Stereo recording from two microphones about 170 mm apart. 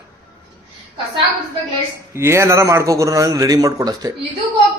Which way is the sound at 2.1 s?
15° right (ahead or behind).